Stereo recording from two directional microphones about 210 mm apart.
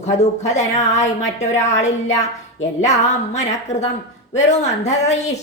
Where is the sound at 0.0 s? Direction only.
35° left (ahead or behind).